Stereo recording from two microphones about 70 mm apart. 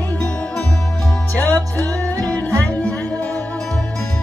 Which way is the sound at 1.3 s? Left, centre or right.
Left.